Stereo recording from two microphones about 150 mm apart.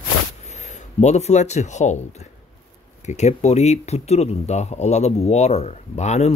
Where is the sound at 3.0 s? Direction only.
50° left (ahead or behind).